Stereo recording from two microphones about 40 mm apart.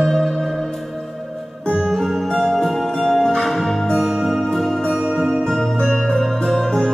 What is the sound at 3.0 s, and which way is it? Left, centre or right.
Music, centre.